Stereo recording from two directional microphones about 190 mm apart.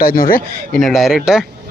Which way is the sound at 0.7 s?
Centre (ahead or behind).